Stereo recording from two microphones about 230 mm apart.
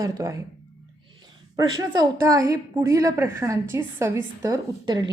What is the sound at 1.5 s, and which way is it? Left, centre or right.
A woman's voice, centre.